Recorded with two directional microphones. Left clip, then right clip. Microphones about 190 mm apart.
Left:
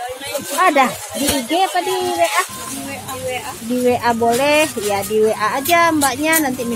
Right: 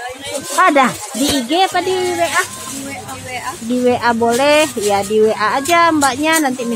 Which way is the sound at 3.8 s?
25° right (ahead or behind).